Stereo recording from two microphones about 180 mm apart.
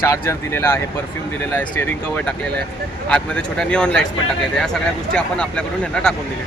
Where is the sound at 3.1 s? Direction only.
5° left (ahead or behind).